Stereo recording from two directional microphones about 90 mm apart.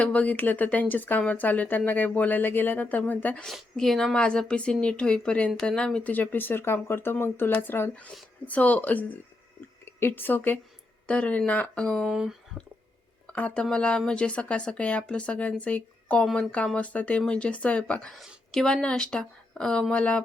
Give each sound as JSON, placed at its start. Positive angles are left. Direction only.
{"t": 0.0, "sound": "speech", "side_deg": 15}
{"t": 3.4, "sound": "speech", "side_deg": 5}
{"t": 12.1, "sound": "speech", "side_deg": -5}
{"t": 13.3, "sound": "speech", "side_deg": 15}